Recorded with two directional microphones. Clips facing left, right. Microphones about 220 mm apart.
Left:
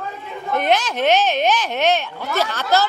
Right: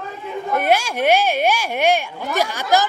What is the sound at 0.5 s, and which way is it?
Speech, 10° right (ahead or behind).